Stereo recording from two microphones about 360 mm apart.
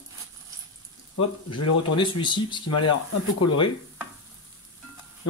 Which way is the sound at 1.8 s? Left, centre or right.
Centre.